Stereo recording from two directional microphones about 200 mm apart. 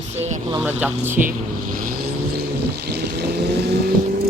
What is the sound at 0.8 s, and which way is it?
Speech, 10° right (ahead or behind).